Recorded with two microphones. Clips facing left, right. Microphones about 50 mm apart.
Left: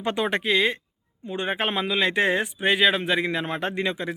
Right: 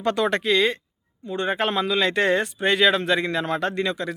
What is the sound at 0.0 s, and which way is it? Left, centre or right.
Speech, centre.